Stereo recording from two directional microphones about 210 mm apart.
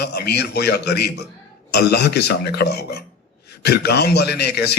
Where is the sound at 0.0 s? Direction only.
50° left (ahead or behind).